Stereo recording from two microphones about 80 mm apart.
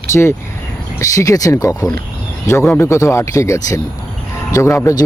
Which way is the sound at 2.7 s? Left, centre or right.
Left.